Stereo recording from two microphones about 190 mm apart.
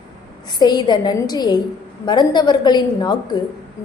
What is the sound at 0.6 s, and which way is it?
A woman's voice, 20° left (ahead or behind).